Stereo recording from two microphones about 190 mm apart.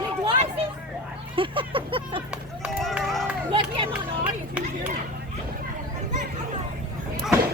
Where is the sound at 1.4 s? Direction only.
30° right (ahead or behind).